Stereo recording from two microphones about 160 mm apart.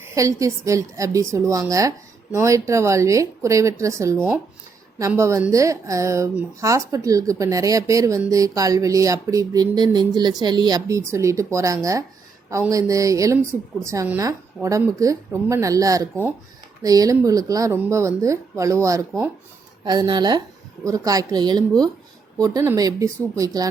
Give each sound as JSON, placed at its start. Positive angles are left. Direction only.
{"t": 0.0, "sound": "a woman's voice", "side_deg": -20}